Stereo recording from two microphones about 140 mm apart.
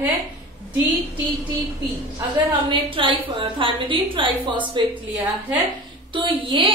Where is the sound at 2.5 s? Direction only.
35° right (ahead or behind).